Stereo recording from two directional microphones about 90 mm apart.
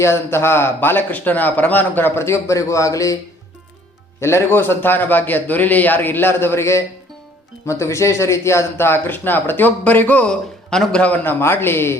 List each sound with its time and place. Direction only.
0.0 s speech: 30° left (ahead or behind)
4.2 s speech: 30° left (ahead or behind)